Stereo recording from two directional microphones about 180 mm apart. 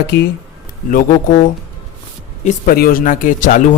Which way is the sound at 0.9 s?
45° left (ahead or behind).